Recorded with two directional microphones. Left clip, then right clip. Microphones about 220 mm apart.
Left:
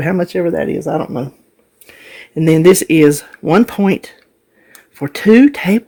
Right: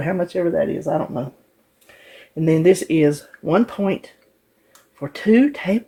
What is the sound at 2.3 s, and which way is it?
Speech, 55° left (ahead or behind).